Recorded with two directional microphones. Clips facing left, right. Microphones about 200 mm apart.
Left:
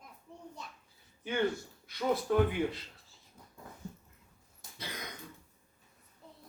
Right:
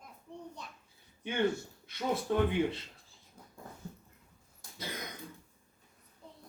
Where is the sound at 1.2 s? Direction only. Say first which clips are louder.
Right 1 dB; 25° right (ahead or behind).